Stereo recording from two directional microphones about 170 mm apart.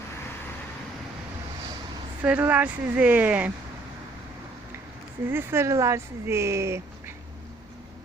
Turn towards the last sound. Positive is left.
turn(degrees=-15)  # may be behind; listen again after turning